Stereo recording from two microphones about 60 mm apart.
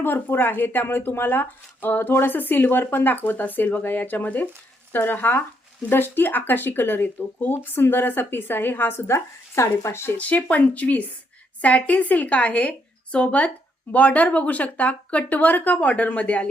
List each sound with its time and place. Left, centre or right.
0.0 s speech: left
10.2 s speech: left